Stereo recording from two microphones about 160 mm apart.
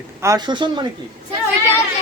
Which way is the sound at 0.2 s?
20° right (ahead or behind).